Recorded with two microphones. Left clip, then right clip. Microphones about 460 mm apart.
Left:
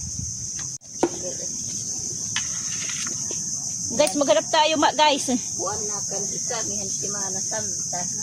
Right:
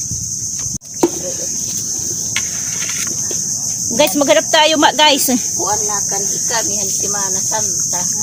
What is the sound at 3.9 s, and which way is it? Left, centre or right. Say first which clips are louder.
Speech: right 7 dB; left.